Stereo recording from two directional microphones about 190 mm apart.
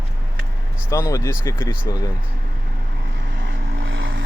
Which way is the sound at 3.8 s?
90° right.